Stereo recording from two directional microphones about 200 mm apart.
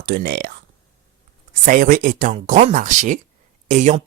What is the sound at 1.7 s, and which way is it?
Speech, 40° right (ahead or behind).